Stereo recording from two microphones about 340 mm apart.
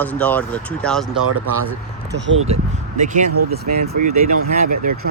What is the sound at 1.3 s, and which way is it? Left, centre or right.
Speech, right.